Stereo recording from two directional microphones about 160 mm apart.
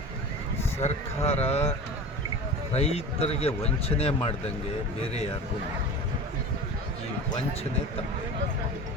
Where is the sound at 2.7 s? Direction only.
40° left (ahead or behind).